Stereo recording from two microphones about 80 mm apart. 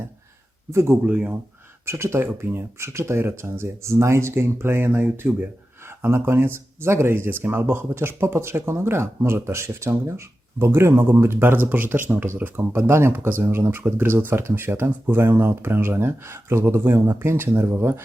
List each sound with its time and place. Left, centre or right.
0.7 s speech: right
1.0 s speech: centre
1.9 s speech: right